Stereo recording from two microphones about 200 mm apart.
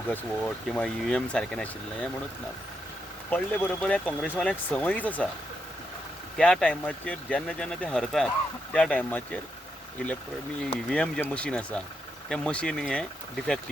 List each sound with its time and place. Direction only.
0.1 s speech: 5° left (ahead or behind)
3.2 s speech: 10° left (ahead or behind)
6.3 s speech: 5° left (ahead or behind)
10.8 s speech: 5° left (ahead or behind)